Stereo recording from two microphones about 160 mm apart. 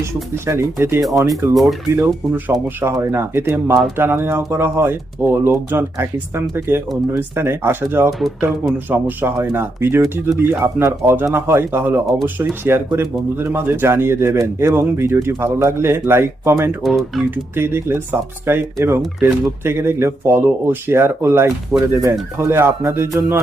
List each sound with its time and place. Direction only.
0.0 s speech: 15° right (ahead or behind)
16.8 s speech: centre (ahead or behind)
17.3 s speech: 15° right (ahead or behind)